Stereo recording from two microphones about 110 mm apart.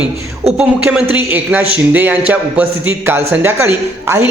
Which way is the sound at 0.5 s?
10° right (ahead or behind).